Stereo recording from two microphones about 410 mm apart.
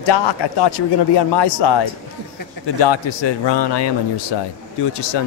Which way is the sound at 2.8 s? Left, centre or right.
Left.